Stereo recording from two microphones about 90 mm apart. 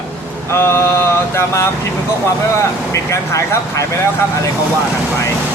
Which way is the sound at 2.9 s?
35° left (ahead or behind).